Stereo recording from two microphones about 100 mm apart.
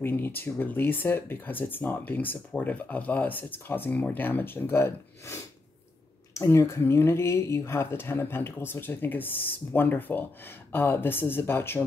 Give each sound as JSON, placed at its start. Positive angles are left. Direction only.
{"t": 0.0, "sound": "speech", "side_deg": 20}